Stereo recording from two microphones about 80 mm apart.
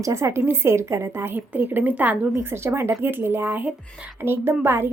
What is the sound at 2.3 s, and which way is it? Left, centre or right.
A woman's voice, right.